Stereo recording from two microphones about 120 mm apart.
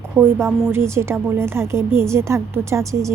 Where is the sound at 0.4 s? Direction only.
20° right (ahead or behind).